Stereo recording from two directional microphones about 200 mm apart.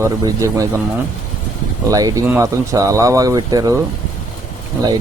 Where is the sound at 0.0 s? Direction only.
15° right (ahead or behind).